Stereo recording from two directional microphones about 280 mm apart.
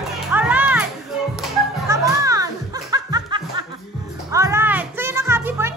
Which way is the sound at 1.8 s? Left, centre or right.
Centre.